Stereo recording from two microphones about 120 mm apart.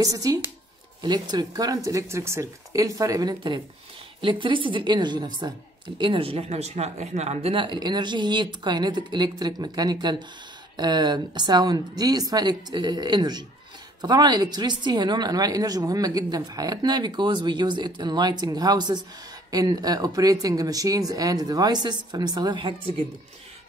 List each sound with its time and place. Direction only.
0.0 s a woman's voice: 30° right (ahead or behind); by 7.5 s 65° right (ahead or behind)
7.5 s a woman's voice: 40° right (ahead or behind)